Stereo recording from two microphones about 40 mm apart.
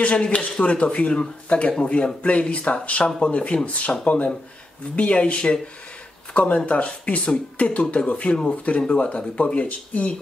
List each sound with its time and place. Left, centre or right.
0.0 s speech: left